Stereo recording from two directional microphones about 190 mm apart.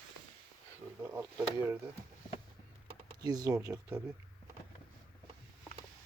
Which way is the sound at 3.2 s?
20° right (ahead or behind).